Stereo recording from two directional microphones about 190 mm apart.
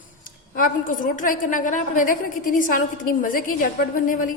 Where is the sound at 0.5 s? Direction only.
45° left (ahead or behind).